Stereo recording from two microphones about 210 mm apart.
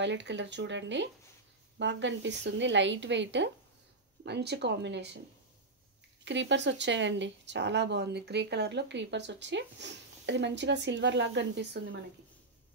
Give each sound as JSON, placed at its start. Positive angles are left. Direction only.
{"t": 0.0, "sound": "speech", "side_deg": -60}
{"t": 6.2, "sound": "speech", "side_deg": -60}